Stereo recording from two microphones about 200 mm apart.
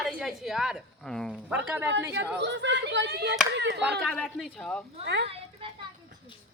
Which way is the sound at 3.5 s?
60° right (ahead or behind).